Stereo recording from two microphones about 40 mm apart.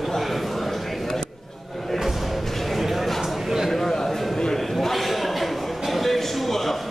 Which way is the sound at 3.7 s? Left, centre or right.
Centre.